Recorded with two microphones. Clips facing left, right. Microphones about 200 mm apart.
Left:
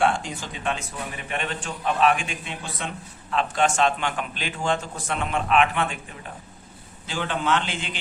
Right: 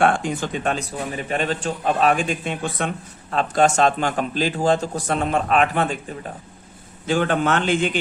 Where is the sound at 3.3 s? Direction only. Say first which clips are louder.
Right 5 dB; 40° right (ahead or behind).